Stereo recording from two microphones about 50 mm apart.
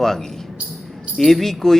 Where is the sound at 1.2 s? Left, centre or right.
Centre.